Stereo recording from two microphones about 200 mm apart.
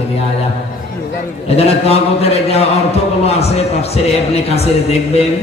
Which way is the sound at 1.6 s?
30° left (ahead or behind).